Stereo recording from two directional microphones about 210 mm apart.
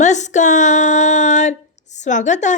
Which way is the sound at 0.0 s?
35° left (ahead or behind).